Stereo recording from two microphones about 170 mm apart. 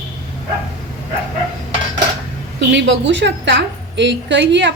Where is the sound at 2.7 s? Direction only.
90° right.